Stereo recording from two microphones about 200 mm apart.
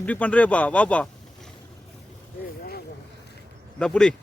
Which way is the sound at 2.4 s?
50° left (ahead or behind).